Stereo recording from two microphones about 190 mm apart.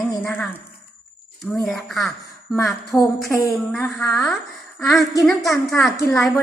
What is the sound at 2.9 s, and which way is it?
A woman's voice, 15° left (ahead or behind).